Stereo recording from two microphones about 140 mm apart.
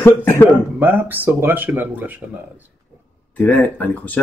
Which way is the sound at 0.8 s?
15° right (ahead or behind).